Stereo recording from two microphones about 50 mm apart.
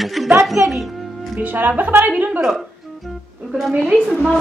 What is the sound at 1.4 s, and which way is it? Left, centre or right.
A woman's voice, right.